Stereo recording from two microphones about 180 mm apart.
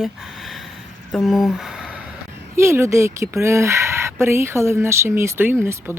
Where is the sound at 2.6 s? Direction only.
15° right (ahead or behind).